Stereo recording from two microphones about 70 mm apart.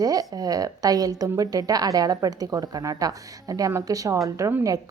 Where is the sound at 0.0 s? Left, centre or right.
Right.